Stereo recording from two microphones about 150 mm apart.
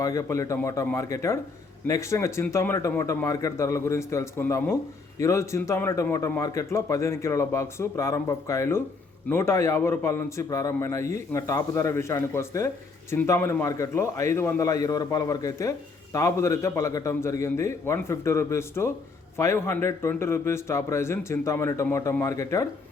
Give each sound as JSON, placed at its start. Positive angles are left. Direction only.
{"t": 0.0, "sound": "a man's voice", "side_deg": 20}